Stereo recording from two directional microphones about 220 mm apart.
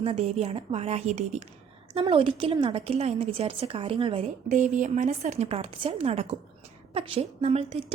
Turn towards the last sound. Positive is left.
turn(degrees=-25)  # may be behind; listen again after turning